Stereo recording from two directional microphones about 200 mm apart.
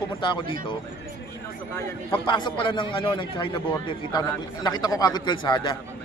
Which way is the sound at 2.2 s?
25° left (ahead or behind).